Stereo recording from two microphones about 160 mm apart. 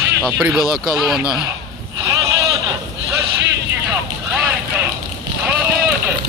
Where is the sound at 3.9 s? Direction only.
10° right (ahead or behind).